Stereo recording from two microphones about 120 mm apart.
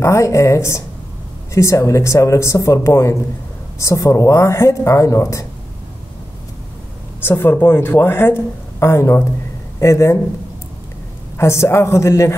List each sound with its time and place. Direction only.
0.0 s speech: 25° left (ahead or behind)
7.2 s a man's voice: 20° left (ahead or behind)
11.3 s speech: 25° left (ahead or behind)